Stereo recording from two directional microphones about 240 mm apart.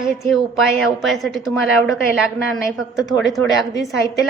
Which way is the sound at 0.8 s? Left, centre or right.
Centre.